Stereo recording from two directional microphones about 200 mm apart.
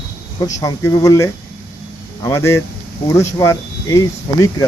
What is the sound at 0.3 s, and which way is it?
Speech, 15° left (ahead or behind).